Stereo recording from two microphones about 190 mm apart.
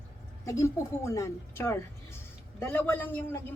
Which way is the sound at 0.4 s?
15° left (ahead or behind).